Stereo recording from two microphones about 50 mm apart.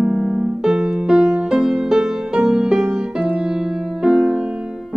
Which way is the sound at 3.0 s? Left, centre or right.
Right.